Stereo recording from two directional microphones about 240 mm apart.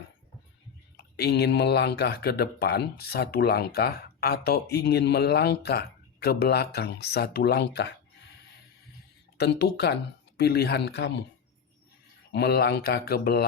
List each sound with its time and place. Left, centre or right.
1.1 s speech: left
9.4 s speech: left
12.3 s speech: left